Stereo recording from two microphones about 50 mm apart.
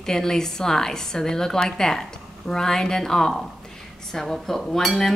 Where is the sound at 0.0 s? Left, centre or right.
Centre.